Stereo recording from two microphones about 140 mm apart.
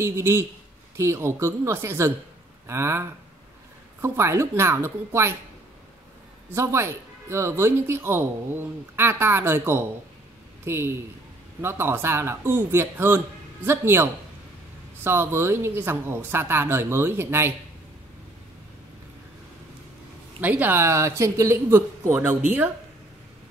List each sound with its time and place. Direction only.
0.0 s speech: 20° right (ahead or behind)
6.5 s a man's voice: 20° right (ahead or behind)
15.0 s speech: 15° right (ahead or behind)
20.3 s speech: 10° right (ahead or behind)